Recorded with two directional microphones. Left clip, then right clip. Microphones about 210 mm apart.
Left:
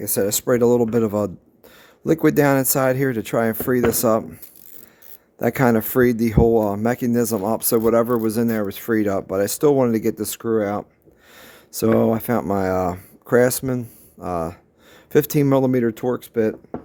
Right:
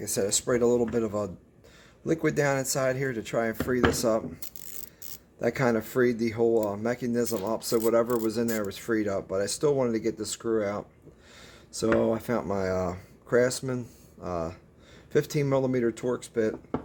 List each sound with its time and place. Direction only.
0.0 s speech: 55° left (ahead or behind)
5.4 s speech: 55° left (ahead or behind)